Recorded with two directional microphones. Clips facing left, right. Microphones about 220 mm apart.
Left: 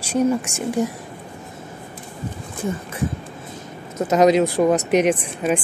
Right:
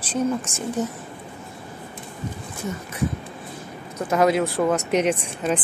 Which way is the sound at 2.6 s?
30° left (ahead or behind).